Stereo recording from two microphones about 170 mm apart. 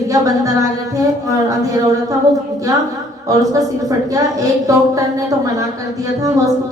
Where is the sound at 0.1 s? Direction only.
20° right (ahead or behind).